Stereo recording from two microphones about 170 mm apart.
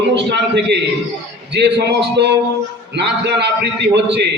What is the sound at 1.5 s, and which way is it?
A man's voice, 80° right.